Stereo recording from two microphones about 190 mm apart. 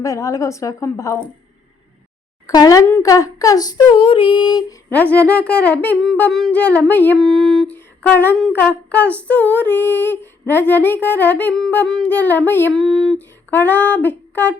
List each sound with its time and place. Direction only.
0.0 s speech: 15° left (ahead or behind)
2.5 s speech: 20° left (ahead or behind)
4.9 s speech: 10° left (ahead or behind)